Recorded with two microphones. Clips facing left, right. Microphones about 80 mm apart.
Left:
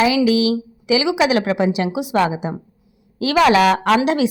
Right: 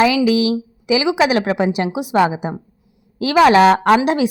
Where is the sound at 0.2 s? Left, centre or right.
Right.